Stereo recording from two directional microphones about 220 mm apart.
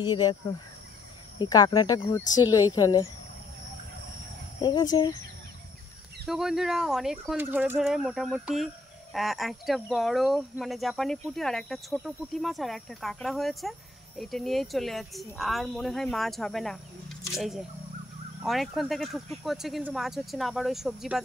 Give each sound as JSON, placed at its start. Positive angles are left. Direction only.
{"t": 0.0, "sound": "speech", "side_deg": 20}
{"t": 1.4, "sound": "speech", "side_deg": 20}
{"t": 4.6, "sound": "speech", "side_deg": 20}
{"t": 6.2, "sound": "speech", "side_deg": 0}